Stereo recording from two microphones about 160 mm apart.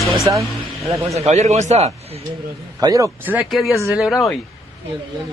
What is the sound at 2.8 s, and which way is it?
Speech, 20° right (ahead or behind).